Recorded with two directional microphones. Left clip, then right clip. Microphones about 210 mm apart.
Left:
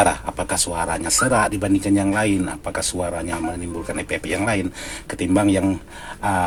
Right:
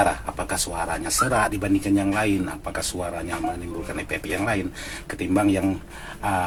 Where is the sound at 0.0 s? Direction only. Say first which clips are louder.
Left 3 dB; 40° left (ahead or behind).